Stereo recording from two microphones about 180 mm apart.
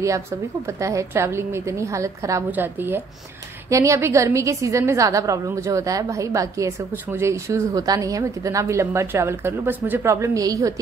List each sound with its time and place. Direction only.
0.7 s a woman's voice: 15° right (ahead or behind)